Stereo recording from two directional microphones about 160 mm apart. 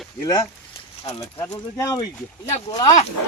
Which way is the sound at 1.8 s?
20° left (ahead or behind).